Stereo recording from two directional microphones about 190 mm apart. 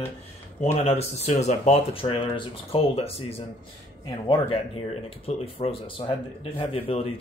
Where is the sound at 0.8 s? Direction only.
35° left (ahead or behind).